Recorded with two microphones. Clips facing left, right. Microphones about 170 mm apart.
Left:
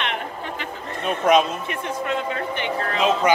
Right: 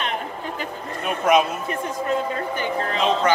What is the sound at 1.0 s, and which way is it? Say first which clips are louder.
Speech: left 1 dB; 5° right (ahead or behind).